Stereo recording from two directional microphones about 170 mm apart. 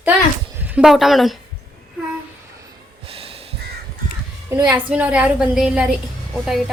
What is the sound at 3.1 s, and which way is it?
Snort, 35° right (ahead or behind).